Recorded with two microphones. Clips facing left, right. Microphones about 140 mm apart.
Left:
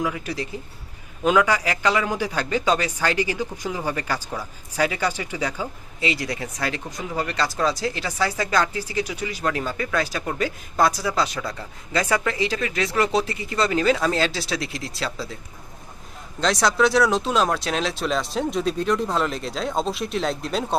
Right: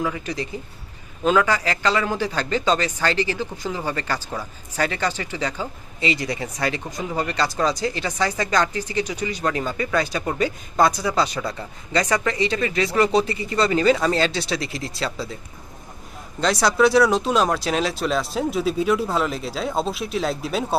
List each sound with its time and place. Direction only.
0.0 s speech: 5° left (ahead or behind)
16.4 s speech: centre (ahead or behind)